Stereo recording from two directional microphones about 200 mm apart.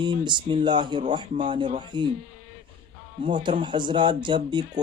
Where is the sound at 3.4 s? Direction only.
25° right (ahead or behind).